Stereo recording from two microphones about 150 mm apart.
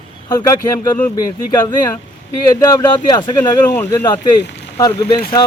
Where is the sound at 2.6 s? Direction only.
25° left (ahead or behind).